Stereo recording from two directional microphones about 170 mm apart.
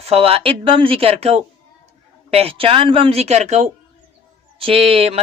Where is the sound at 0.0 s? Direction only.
35° right (ahead or behind).